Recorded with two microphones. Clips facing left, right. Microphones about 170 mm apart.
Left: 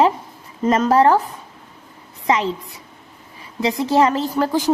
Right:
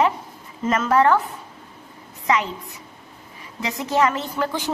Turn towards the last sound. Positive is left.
turn(degrees=35)  # may be behind; listen again after turning